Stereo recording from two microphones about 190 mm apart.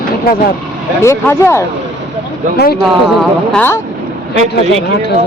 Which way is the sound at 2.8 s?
5° left (ahead or behind).